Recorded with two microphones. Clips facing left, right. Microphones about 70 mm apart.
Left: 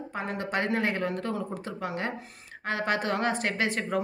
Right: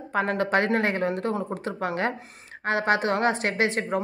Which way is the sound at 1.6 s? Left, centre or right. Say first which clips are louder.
Right 6 dB; right.